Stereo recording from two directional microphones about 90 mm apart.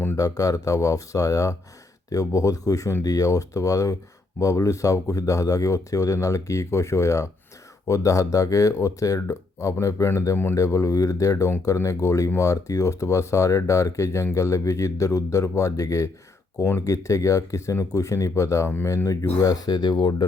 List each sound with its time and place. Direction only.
0.2 s speech: 40° left (ahead or behind); by 20.2 s 60° left (ahead or behind)